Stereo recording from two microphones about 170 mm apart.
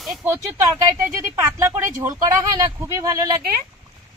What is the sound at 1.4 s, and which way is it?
Speech, 15° right (ahead or behind).